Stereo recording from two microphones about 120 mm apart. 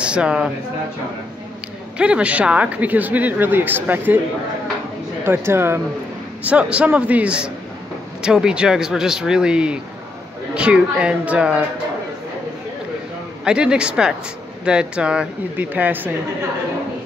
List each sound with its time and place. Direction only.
0.0 s speech: 10° right (ahead or behind)
2.0 s speech: 10° right (ahead or behind)
5.2 s speech: 20° right (ahead or behind)
13.4 s speech: 5° right (ahead or behind)